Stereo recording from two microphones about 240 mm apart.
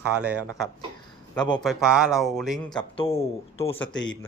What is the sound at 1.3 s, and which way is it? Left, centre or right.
Speech, centre.